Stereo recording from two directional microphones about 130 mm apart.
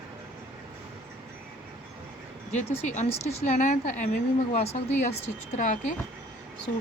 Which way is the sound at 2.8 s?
65° left (ahead or behind).